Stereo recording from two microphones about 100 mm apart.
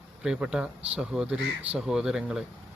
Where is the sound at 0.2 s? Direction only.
10° right (ahead or behind).